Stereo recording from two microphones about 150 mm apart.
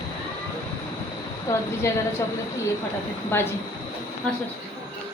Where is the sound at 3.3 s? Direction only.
15° left (ahead or behind).